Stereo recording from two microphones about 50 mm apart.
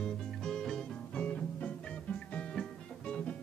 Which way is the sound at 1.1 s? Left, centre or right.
Left.